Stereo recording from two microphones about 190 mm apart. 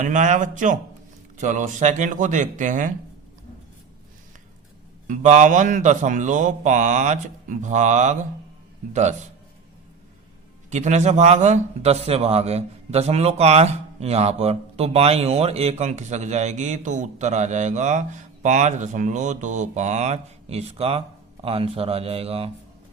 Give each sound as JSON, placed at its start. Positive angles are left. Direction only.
{"t": 0.0, "sound": "a man's voice", "side_deg": -40}
{"t": 5.0, "sound": "a man's voice", "side_deg": -40}
{"t": 10.7, "sound": "a man's voice", "side_deg": -40}